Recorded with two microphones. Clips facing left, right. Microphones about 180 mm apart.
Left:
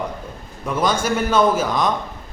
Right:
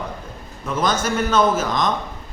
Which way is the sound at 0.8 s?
10° left (ahead or behind).